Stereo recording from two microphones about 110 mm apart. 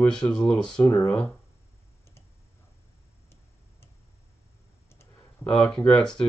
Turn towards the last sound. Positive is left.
turn(degrees=5)  # may be behind; listen again after turning